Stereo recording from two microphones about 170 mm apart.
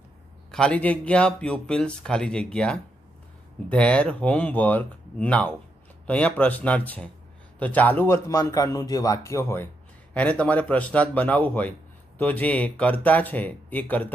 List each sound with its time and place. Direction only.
0.5 s a man's voice: 5° left (ahead or behind)